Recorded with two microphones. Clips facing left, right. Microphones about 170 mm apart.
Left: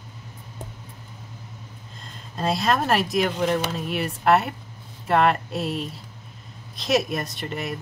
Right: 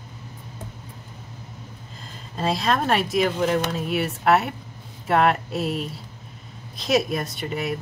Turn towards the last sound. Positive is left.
turn(degrees=0)  # may be behind; listen again after turning